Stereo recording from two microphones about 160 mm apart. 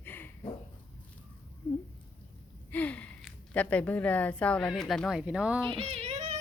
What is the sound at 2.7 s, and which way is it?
Gasp, 10° left (ahead or behind).